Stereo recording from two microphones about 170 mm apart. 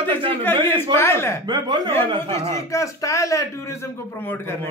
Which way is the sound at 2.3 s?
15° left (ahead or behind).